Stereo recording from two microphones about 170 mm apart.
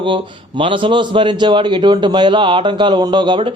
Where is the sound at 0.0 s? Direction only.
30° right (ahead or behind).